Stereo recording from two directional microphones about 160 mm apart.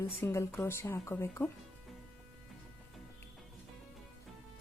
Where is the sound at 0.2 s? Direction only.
15° left (ahead or behind).